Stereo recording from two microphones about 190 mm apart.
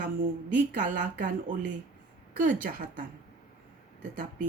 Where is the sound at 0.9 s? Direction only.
45° right (ahead or behind).